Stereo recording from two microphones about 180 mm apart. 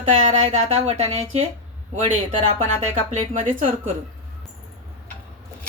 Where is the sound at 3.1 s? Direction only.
45° right (ahead or behind).